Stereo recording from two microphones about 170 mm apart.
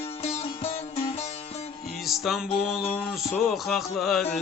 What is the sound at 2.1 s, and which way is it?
Speech, centre (ahead or behind).